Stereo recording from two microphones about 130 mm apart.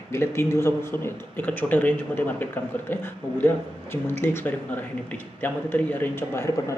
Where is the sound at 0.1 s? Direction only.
20° left (ahead or behind).